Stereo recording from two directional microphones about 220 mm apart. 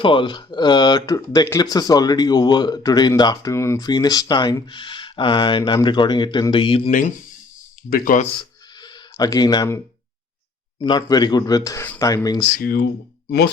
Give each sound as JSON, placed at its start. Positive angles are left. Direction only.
{"t": 0.0, "sound": "speech", "side_deg": 20}
{"t": 8.8, "sound": "speech", "side_deg": 15}
{"t": 12.5, "sound": "speech", "side_deg": 40}